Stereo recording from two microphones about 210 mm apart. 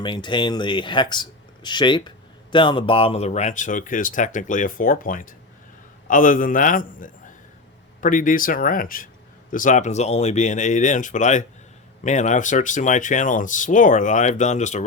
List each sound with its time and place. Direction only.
0.0 s speech: 20° left (ahead or behind)